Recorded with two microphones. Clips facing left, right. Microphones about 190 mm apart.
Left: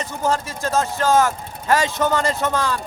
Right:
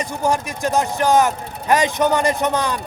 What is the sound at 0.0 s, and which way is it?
A man's voice, 15° right (ahead or behind).